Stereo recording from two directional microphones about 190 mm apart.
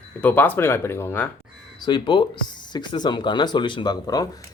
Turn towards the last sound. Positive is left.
turn(degrees=20)  # may be behind; listen again after turning